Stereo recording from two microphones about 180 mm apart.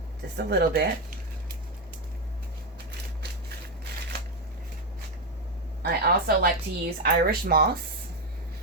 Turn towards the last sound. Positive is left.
turn(degrees=-60)  # may be behind; listen again after turning